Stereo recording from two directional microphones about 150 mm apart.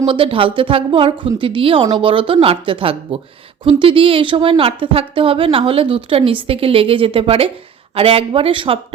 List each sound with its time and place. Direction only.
0.0 s a woman's voice: 35° right (ahead or behind)